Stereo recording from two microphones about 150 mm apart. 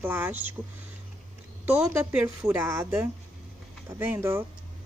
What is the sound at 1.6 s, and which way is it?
A woman's voice, 15° right (ahead or behind).